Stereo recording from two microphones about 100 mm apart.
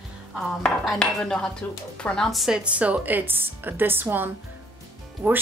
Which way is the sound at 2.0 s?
5° left (ahead or behind).